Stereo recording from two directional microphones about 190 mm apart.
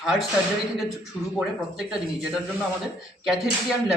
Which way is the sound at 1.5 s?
Centre (ahead or behind).